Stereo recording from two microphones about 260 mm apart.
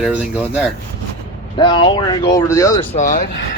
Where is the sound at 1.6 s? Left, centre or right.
Centre.